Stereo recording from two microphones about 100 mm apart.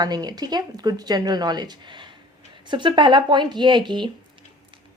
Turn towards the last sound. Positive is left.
turn(degrees=-50)  # may be behind; listen again after turning